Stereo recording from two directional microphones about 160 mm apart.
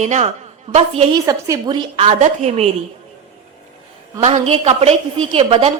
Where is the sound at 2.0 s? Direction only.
45° right (ahead or behind).